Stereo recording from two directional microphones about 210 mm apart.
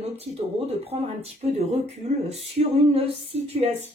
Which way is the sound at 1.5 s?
30° right (ahead or behind).